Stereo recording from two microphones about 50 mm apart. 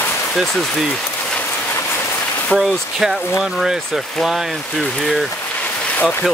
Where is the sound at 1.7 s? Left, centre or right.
Left.